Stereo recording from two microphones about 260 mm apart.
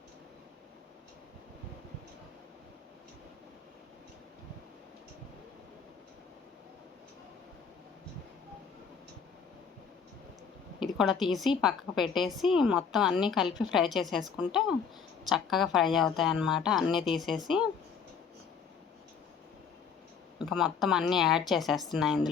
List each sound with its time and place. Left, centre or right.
10.8 s a woman's voice: centre
20.4 s a woman's voice: centre